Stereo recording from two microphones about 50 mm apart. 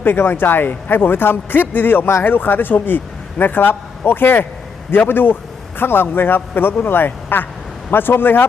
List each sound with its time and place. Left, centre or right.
0.0 s a man's voice: left